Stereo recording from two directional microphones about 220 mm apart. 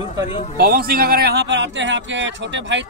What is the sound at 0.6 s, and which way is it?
A man's voice, 40° right (ahead or behind).